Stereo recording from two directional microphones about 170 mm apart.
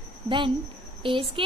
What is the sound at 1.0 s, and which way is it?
Speech, 30° right (ahead or behind).